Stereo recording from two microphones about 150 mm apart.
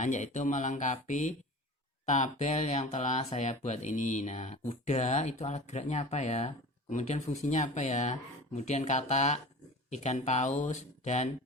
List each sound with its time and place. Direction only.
0.0 s speech: 55° left (ahead or behind)